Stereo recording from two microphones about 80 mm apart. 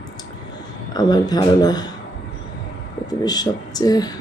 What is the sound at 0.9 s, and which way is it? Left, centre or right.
A man's voice, left.